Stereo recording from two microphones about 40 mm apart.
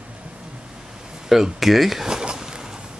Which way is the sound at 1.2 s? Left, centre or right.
Centre.